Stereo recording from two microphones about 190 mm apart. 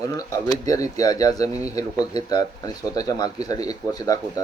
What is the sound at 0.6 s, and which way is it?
Speech, 20° left (ahead or behind).